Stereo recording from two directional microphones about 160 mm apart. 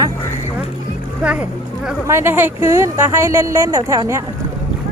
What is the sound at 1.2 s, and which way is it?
Speech, 10° right (ahead or behind).